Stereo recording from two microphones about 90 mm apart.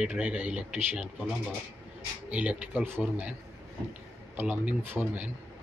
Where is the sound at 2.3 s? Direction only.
15° right (ahead or behind).